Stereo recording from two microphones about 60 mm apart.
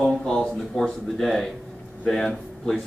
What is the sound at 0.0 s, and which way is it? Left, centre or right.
Speech, centre.